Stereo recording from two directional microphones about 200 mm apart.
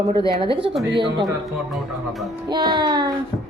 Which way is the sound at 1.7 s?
Centre (ahead or behind).